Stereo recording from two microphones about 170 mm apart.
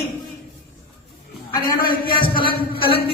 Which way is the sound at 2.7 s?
65° left (ahead or behind).